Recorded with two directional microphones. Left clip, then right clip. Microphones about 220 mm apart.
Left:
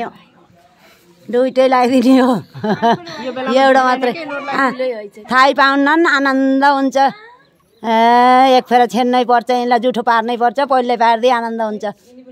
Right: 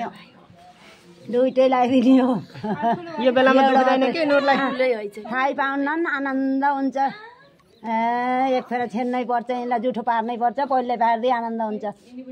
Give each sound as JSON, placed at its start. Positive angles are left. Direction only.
{"t": 1.3, "sound": "speech", "side_deg": 25}
{"t": 3.3, "sound": "speech", "side_deg": -40}
{"t": 3.5, "sound": "speech", "side_deg": 20}
{"t": 4.1, "sound": "speech", "side_deg": -35}
{"t": 4.7, "sound": "a woman's voice", "side_deg": 5}
{"t": 5.3, "sound": "speech", "side_deg": 30}